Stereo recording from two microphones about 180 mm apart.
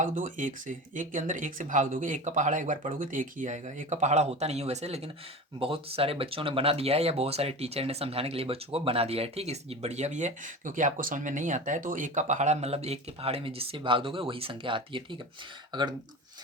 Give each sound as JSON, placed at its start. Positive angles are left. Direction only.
{"t": 0.0, "sound": "speech", "side_deg": -45}